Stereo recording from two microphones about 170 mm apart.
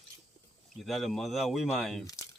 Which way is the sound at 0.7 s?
Centre (ahead or behind).